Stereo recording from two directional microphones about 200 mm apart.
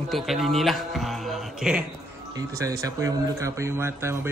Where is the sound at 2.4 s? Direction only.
15° right (ahead or behind).